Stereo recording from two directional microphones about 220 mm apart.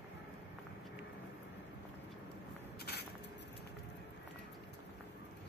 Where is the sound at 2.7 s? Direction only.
45° left (ahead or behind).